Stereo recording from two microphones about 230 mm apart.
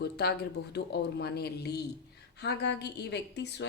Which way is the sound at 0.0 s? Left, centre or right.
Left.